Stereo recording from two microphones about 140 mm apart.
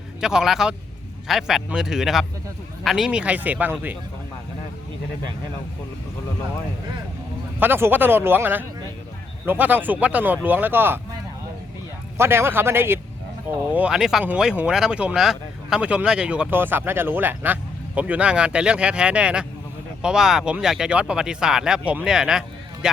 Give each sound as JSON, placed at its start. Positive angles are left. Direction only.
{"t": 0.2, "sound": "speech", "side_deg": -5}
{"t": 7.6, "sound": "speech", "side_deg": -15}
{"t": 12.1, "sound": "speech", "side_deg": -20}